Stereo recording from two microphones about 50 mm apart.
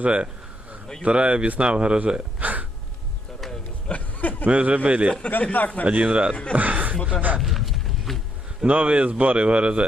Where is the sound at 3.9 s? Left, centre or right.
Left.